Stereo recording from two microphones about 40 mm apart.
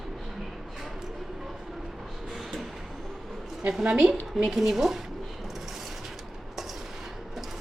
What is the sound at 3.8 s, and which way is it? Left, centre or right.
Speech, right.